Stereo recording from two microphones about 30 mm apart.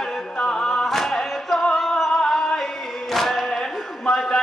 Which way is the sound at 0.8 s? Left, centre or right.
Centre.